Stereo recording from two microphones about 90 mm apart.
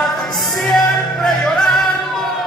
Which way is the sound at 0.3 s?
Centre (ahead or behind).